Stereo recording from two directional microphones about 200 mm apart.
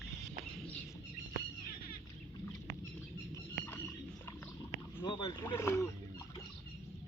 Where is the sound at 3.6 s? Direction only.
10° left (ahead or behind).